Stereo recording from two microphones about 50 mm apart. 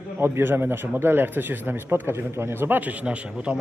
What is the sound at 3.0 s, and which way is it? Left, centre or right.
Speech, right.